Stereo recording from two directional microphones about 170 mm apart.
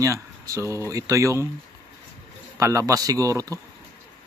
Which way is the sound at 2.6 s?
20° right (ahead or behind).